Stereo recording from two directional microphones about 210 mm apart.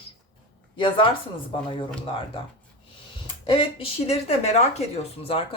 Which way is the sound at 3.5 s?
25° left (ahead or behind).